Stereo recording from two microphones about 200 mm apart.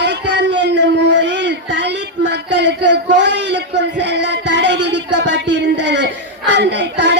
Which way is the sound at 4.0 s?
60° right (ahead or behind).